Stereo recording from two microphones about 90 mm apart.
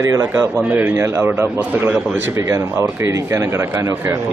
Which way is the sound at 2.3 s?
30° right (ahead or behind).